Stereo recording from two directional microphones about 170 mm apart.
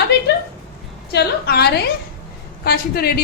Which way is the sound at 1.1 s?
70° left (ahead or behind).